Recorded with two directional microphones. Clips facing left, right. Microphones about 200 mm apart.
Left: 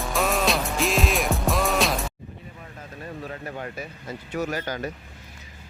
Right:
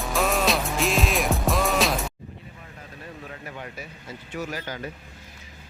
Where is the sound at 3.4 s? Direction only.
45° left (ahead or behind).